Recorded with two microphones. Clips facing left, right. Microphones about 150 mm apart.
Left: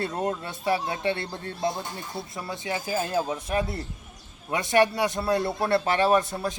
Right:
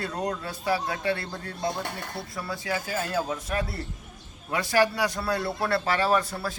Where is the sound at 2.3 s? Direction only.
20° left (ahead or behind).